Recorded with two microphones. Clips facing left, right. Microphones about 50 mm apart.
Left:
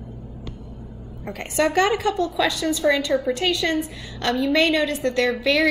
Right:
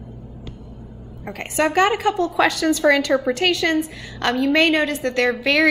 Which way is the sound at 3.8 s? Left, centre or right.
Right.